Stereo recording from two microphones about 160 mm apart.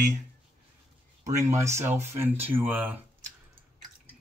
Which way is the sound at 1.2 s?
20° right (ahead or behind).